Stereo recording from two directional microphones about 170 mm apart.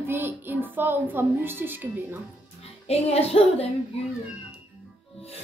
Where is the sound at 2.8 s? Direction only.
35° left (ahead or behind).